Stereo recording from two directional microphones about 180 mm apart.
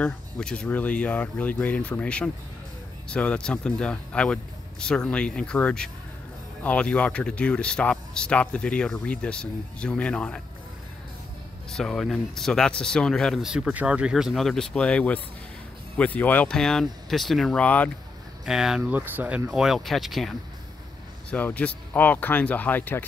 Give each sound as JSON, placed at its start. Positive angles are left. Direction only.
{"t": 0.0, "sound": "speech", "side_deg": 5}
{"t": 11.7, "sound": "speech", "side_deg": 0}
{"t": 18.4, "sound": "speech", "side_deg": -5}